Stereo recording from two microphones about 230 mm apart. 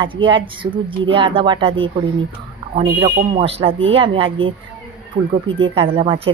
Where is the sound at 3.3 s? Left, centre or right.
Right.